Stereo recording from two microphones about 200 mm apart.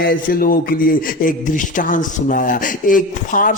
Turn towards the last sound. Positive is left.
turn(degrees=40)  # may be behind; listen again after turning